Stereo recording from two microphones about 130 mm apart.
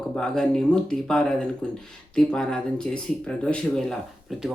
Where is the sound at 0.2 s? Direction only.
5° left (ahead or behind).